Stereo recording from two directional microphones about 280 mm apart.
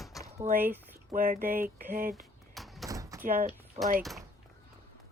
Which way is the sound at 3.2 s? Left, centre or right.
Right.